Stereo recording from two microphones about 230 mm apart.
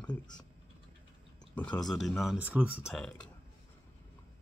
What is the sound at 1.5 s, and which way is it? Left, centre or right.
Speech, centre.